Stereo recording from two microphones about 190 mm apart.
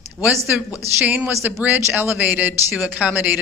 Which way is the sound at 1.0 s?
10° right (ahead or behind).